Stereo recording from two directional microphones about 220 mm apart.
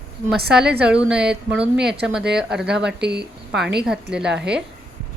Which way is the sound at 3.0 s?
50° right (ahead or behind).